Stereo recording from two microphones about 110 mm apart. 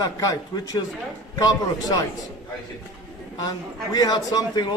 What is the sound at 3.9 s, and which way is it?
Speech, 40° left (ahead or behind).